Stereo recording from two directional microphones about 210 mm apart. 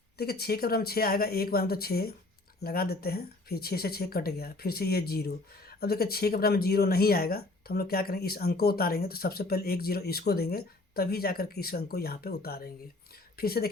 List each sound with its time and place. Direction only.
0.2 s speech: 50° left (ahead or behind)